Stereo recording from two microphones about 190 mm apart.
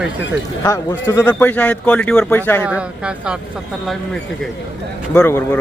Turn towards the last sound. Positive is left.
turn(degrees=10)  # may be behind; listen again after turning